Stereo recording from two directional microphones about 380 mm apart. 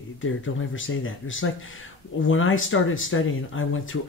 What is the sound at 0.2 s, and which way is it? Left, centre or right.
Speech, left.